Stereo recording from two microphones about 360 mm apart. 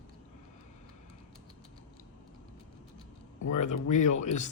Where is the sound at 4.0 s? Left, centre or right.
Left.